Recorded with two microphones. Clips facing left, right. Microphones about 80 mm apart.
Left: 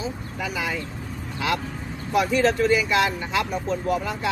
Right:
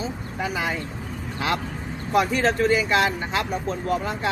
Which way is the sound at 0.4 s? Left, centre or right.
Right.